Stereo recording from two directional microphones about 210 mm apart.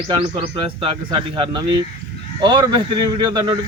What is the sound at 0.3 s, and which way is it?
A man's voice, 25° right (ahead or behind).